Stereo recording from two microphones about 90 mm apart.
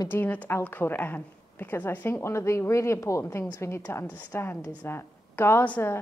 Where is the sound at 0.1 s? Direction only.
20° left (ahead or behind).